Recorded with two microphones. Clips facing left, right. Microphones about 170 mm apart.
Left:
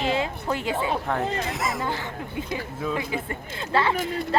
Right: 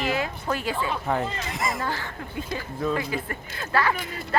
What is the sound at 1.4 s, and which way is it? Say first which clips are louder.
Speech: left 1 dB; centre (ahead or behind).